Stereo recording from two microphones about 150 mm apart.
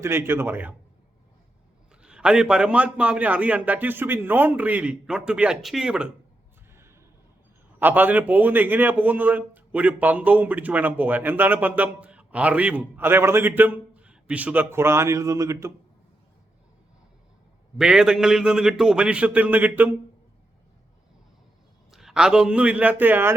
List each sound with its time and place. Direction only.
0.0 s a man's voice: 15° right (ahead or behind)
2.0 s a man's voice: 5° right (ahead or behind)
7.8 s a man's voice: 10° right (ahead or behind)
17.7 s a man's voice: 5° right (ahead or behind)
21.9 s a man's voice: 5° right (ahead or behind)